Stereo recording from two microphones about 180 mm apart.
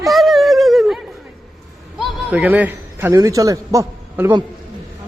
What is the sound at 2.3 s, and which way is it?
A man's voice, 10° right (ahead or behind).